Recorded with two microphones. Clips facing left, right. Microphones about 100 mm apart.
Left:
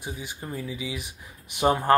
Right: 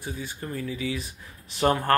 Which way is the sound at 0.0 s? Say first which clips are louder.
Right 1 dB; 15° left (ahead or behind).